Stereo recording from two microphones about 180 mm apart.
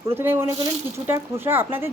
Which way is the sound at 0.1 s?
15° right (ahead or behind).